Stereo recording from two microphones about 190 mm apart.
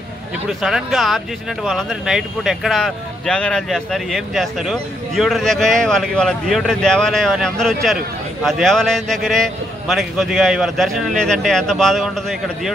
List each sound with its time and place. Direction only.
0.6 s speech: centre (ahead or behind)